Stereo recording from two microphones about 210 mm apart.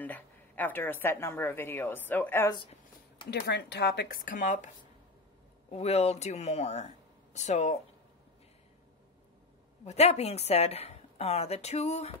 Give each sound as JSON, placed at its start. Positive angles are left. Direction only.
{"t": 0.0, "sound": "a woman's voice", "side_deg": 10}
{"t": 3.3, "sound": "speech", "side_deg": 55}
{"t": 5.7, "sound": "a woman's voice", "side_deg": 30}
{"t": 9.8, "sound": "a woman's voice", "side_deg": 30}